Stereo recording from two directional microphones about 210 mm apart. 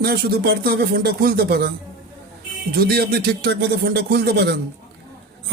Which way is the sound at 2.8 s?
50° right (ahead or behind).